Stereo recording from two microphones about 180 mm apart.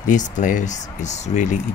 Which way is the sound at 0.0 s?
45° left (ahead or behind).